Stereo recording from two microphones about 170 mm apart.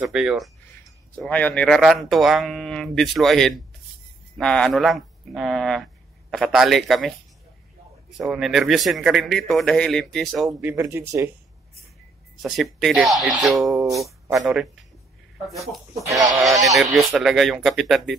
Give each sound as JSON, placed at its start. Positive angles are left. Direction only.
{"t": 0.0, "sound": "speech", "side_deg": -5}
{"t": 1.2, "sound": "speech", "side_deg": 10}
{"t": 8.2, "sound": "speech", "side_deg": 0}
{"t": 10.6, "sound": "speech", "side_deg": -15}
{"t": 12.4, "sound": "speech", "side_deg": 0}
{"t": 13.7, "sound": "speech", "side_deg": -20}
{"t": 16.1, "sound": "speech", "side_deg": -20}
{"t": 16.7, "sound": "speech", "side_deg": 0}